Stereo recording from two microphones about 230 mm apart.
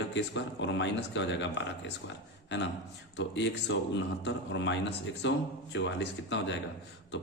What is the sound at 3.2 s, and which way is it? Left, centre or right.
Speech, left.